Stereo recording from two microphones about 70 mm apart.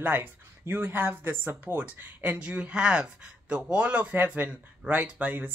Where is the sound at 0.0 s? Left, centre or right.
Right.